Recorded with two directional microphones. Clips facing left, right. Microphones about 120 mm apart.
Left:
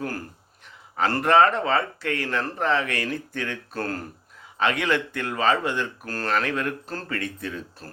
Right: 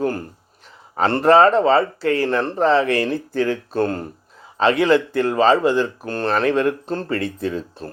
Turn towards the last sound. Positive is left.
turn(degrees=-25)  # may be behind; listen again after turning